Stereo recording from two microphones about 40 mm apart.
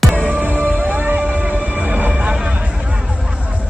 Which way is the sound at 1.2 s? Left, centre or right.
Right.